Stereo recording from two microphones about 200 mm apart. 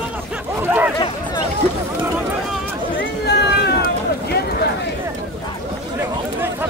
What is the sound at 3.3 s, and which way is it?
Run, 55° left (ahead or behind).